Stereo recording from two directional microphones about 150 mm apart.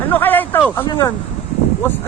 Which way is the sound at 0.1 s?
10° left (ahead or behind).